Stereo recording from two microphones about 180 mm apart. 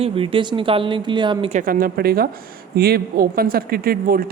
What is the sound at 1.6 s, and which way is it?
Speech, 50° right (ahead or behind).